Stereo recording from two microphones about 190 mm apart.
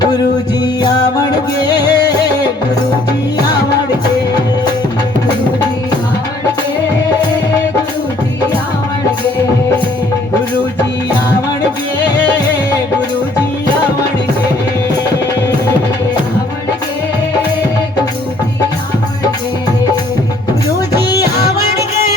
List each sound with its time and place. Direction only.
1.5 s music: 20° left (ahead or behind)